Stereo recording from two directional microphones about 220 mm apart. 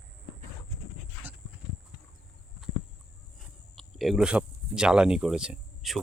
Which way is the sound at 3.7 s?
Centre (ahead or behind).